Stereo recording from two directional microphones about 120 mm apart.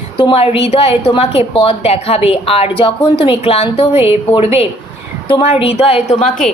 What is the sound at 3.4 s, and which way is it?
A woman's voice, 60° left (ahead or behind).